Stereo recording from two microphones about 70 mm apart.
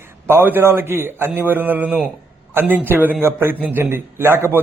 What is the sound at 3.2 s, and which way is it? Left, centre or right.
Speech, right.